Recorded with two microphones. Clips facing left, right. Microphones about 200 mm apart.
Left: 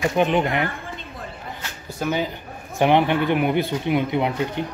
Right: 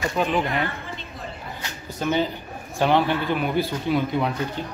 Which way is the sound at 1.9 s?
10° left (ahead or behind).